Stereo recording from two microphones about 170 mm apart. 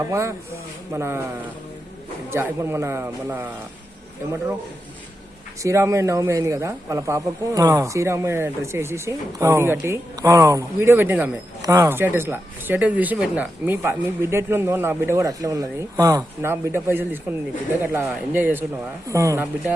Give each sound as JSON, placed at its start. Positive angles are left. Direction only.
{"t": 0.0, "sound": "speech", "side_deg": -15}
{"t": 2.3, "sound": "speech", "side_deg": -15}
{"t": 5.6, "sound": "speech", "side_deg": -15}